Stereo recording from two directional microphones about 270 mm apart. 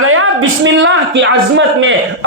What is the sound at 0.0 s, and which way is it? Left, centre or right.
A woman's voice, right.